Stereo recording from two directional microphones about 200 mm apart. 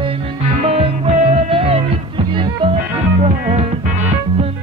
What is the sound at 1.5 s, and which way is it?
Music, 30° right (ahead or behind).